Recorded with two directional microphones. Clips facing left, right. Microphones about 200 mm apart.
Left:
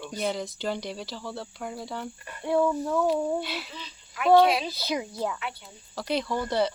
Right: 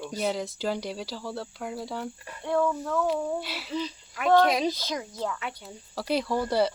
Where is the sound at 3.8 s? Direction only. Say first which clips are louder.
Right 13 dB; 45° right (ahead or behind).